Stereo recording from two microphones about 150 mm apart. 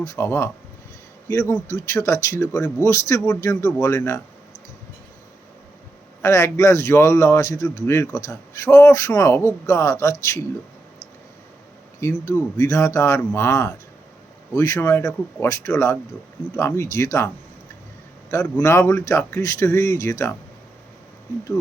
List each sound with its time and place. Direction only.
0.0 s a man's voice: 20° left (ahead or behind)
6.2 s a man's voice: 20° left (ahead or behind)
11.9 s a man's voice: 20° left (ahead or behind)